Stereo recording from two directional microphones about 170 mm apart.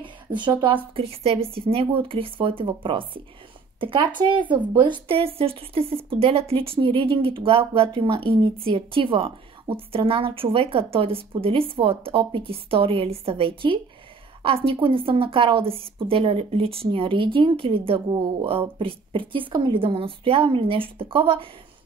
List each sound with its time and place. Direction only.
0.0 s a woman's voice: 25° right (ahead or behind)